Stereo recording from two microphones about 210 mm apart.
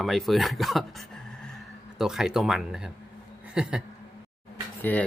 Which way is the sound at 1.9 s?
Centre (ahead or behind).